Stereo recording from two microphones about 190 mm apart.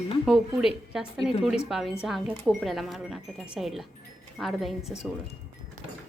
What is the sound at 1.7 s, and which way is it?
Speech, centre (ahead or behind).